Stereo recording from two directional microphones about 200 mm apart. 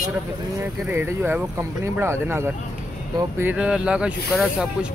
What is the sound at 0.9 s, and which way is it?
Speech, 10° right (ahead or behind).